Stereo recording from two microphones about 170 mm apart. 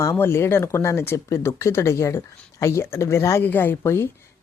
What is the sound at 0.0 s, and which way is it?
Speech, 15° left (ahead or behind).